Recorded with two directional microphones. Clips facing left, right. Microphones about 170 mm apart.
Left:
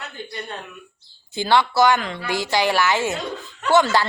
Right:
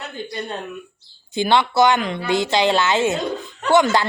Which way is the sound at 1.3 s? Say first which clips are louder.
Right 1 dB; 20° right (ahead or behind).